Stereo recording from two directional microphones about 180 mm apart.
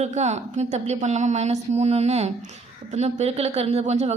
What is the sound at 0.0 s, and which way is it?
Speech, 40° right (ahead or behind).